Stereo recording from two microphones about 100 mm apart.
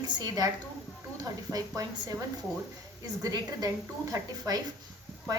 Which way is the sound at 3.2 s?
40° right (ahead or behind).